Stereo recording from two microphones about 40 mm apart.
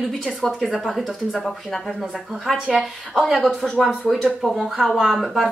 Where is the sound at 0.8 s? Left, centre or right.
Centre.